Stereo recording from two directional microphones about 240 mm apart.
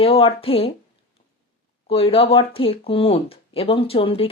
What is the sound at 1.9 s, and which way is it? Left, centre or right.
Speech, left.